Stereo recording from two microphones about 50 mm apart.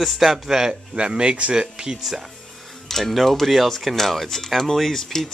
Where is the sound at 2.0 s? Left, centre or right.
Centre.